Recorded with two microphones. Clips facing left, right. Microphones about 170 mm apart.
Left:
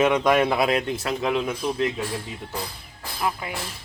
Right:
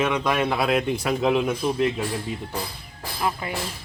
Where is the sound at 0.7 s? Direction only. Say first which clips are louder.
Right 1 dB; 5° right (ahead or behind).